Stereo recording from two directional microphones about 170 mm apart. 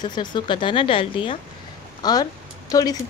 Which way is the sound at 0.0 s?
25° left (ahead or behind).